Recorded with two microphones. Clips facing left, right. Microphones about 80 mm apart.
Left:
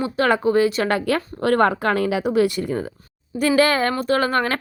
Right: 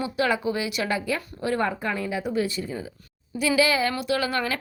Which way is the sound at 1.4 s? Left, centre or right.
Left.